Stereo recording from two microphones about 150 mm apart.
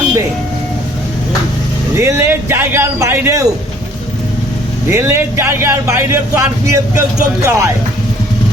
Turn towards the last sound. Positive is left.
turn(degrees=-20)  # may be behind; listen again after turning